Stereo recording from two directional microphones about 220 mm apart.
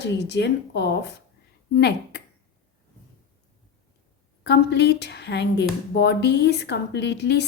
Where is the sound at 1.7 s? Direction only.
50° left (ahead or behind).